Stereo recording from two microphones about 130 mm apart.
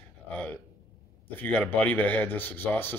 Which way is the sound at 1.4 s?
15° left (ahead or behind).